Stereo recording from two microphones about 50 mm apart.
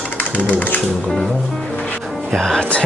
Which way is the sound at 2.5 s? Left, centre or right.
Centre.